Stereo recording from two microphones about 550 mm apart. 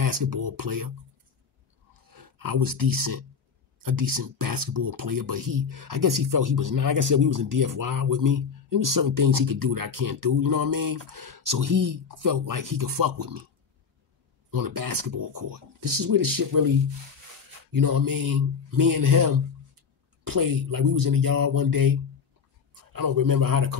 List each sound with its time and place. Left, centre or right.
0.0 s speech: right
2.0 s speech: right
14.5 s speech: right
17.7 s speech: right
22.9 s speech: right